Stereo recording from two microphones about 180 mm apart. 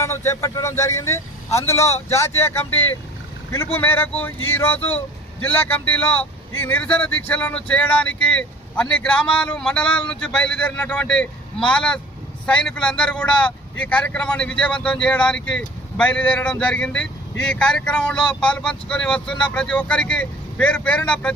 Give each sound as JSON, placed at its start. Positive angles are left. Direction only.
{"t": 0.0, "sound": "speech", "side_deg": 15}